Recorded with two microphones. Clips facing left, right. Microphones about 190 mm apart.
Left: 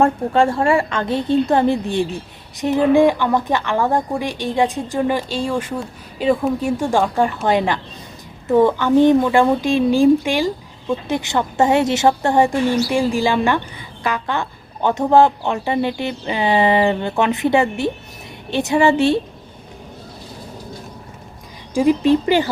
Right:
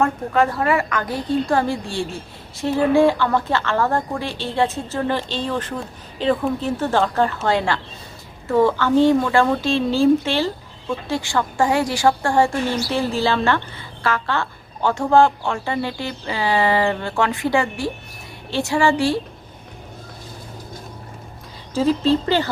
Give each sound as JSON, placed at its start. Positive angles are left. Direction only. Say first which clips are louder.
{"t": 0.0, "sound": "a woman's voice", "louder": "left 3 dB", "side_deg": 30}
{"t": 21.8, "sound": "a woman's voice", "louder": "left 3 dB", "side_deg": 15}